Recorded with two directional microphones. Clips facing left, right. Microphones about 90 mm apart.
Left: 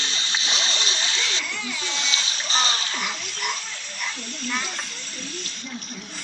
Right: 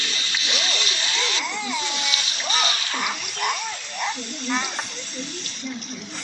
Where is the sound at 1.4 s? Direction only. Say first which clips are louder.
Right 4 dB; 20° right (ahead or behind).